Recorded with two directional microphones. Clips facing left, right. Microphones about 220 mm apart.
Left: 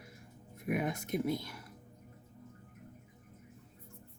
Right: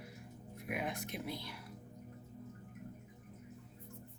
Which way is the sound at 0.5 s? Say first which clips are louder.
Left 6 dB; 45° left (ahead or behind).